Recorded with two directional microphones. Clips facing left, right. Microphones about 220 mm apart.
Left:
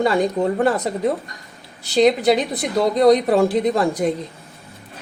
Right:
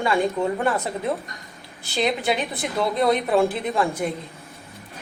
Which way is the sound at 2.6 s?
40° left (ahead or behind).